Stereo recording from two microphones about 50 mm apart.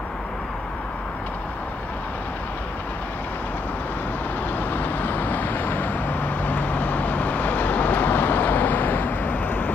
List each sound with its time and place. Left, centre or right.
4.6 s vehicle: left